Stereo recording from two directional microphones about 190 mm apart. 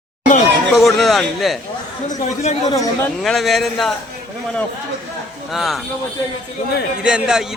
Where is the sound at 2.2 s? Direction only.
40° left (ahead or behind).